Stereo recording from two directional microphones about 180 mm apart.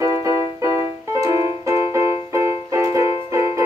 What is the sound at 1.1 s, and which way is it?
Music, 15° right (ahead or behind).